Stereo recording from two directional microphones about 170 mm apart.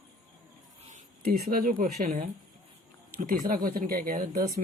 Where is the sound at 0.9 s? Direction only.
65° right (ahead or behind).